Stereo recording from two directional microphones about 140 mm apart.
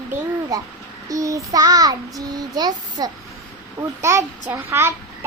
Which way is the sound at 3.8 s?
20° right (ahead or behind).